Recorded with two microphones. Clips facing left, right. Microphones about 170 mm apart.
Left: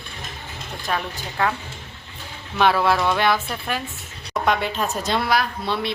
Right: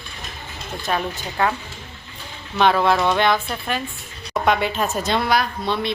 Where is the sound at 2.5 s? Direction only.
5° left (ahead or behind).